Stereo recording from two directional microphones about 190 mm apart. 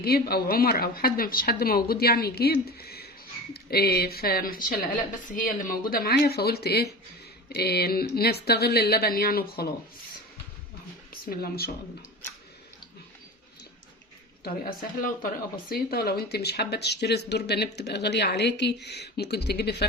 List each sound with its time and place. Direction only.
0.0 s a woman's voice: 55° left (ahead or behind)
11.1 s speech: 50° left (ahead or behind)
14.4 s a woman's voice: 50° left (ahead or behind)